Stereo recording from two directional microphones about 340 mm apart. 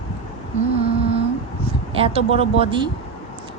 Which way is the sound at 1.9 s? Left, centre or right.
Centre.